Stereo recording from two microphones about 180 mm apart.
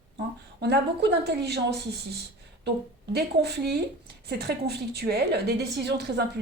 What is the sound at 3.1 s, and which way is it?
A woman's voice, 65° right (ahead or behind).